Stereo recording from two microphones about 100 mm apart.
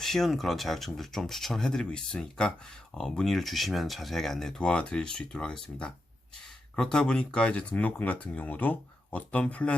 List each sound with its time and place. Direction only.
0.0 s speech: 5° left (ahead or behind)